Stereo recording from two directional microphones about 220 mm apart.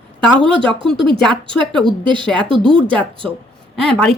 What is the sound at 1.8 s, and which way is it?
Speech, 20° right (ahead or behind).